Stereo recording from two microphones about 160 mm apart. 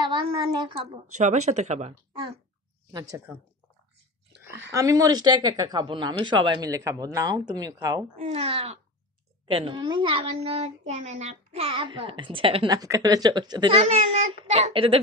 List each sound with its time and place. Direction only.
0.0 s a woman's voice: 30° right (ahead or behind)
1.1 s speech: 45° right (ahead or behind)
2.9 s speech: 25° right (ahead or behind)
4.6 s speech: 20° right (ahead or behind)
8.3 s a child's voice: 40° right (ahead or behind)
12.7 s a child's voice: 20° right (ahead or behind)